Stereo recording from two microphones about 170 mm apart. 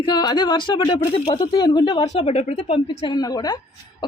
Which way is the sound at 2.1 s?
40° left (ahead or behind).